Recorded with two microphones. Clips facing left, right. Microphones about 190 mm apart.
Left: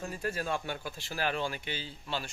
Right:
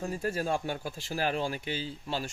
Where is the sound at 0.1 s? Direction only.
40° right (ahead or behind).